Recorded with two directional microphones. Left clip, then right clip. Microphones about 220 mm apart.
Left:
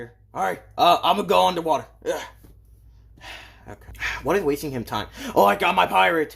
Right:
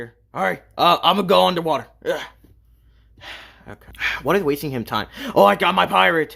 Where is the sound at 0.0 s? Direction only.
30° right (ahead or behind).